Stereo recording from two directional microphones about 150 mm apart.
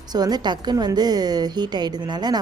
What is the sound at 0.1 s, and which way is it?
Speech, 25° right (ahead or behind).